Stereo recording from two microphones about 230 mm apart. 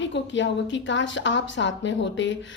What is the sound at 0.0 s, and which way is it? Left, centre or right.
A woman's voice, left.